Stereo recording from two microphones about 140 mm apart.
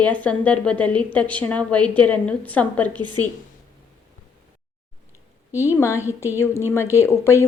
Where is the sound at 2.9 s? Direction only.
30° right (ahead or behind).